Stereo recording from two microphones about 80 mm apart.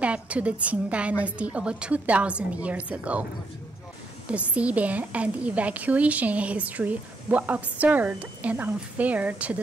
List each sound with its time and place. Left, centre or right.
0.0 s a woman's voice: centre
4.3 s a woman's voice: centre